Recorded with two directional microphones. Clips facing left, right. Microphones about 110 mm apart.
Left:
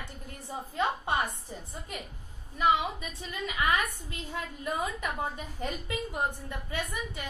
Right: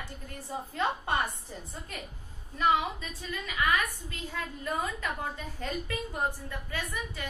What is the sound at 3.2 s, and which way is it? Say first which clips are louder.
A woman's voice: even; 20° left (ahead or behind).